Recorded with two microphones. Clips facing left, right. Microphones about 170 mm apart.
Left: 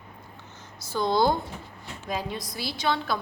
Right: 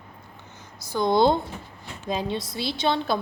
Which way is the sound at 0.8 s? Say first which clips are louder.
Right 3 dB; 15° right (ahead or behind).